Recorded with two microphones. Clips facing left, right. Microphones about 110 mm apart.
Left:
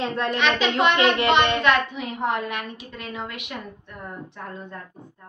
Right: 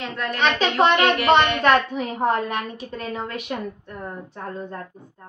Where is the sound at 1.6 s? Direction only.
40° right (ahead or behind).